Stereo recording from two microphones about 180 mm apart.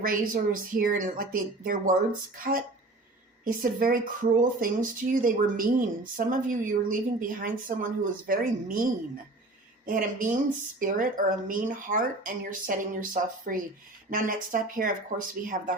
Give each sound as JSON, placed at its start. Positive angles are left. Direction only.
{"t": 0.0, "sound": "speech", "side_deg": -50}